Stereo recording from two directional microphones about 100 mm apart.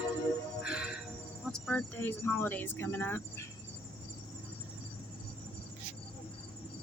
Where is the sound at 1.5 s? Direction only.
15° left (ahead or behind).